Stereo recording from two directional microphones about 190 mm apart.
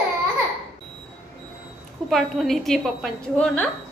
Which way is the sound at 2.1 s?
Centre (ahead or behind).